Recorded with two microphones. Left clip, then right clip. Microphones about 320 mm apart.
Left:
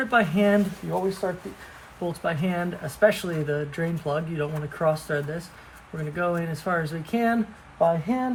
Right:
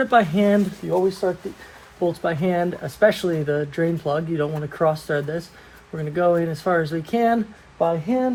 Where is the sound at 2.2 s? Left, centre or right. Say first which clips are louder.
Right 3 dB; right.